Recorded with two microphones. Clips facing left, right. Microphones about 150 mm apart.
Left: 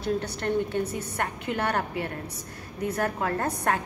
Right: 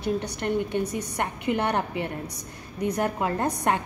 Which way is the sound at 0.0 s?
15° right (ahead or behind).